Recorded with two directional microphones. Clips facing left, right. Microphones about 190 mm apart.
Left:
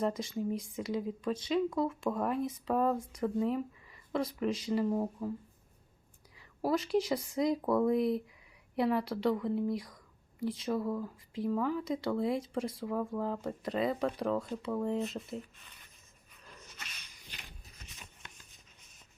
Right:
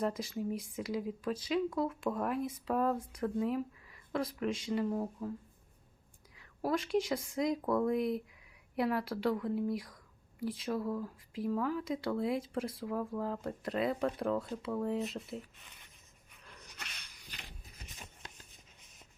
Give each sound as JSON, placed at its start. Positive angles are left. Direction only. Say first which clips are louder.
{"t": 0.0, "sound": "speech", "louder": "left 2 dB", "side_deg": 0}
{"t": 6.6, "sound": "speech", "louder": "left 2 dB", "side_deg": 0}